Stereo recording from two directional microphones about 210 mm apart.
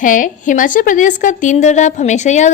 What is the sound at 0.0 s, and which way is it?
A woman's voice, 40° left (ahead or behind).